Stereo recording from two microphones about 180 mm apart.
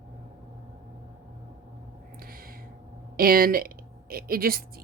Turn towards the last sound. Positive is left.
turn(degrees=-55)  # may be behind; listen again after turning